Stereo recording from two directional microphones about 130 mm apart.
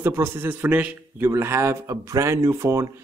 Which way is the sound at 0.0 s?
20° right (ahead or behind).